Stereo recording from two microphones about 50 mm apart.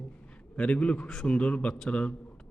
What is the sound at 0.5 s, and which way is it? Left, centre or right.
Speech, left.